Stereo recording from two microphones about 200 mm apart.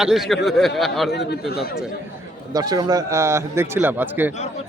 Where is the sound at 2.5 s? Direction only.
20° right (ahead or behind).